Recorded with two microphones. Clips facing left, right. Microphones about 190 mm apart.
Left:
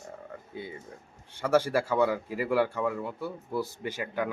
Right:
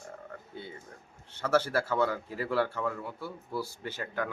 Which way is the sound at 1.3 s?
15° left (ahead or behind).